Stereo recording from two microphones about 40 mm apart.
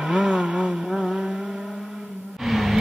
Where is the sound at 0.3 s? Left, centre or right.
Right.